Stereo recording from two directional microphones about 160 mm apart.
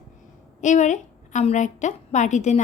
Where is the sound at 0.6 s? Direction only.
50° left (ahead or behind).